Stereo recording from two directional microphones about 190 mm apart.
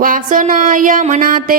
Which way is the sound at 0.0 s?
45° right (ahead or behind).